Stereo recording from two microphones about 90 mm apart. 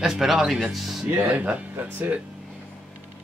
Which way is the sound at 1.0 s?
20° right (ahead or behind).